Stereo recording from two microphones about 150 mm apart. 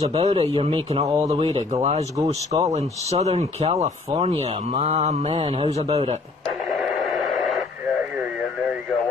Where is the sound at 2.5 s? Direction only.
35° right (ahead or behind).